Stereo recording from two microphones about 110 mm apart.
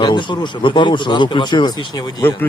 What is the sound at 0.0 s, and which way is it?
Speech, 45° left (ahead or behind).